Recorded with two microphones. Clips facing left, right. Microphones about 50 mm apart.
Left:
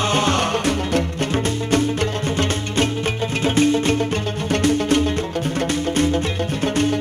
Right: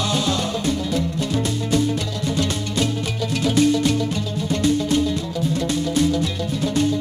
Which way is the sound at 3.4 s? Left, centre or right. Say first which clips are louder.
Even; left.